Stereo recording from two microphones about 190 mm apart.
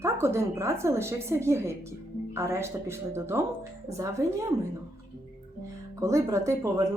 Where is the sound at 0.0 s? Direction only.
15° right (ahead or behind).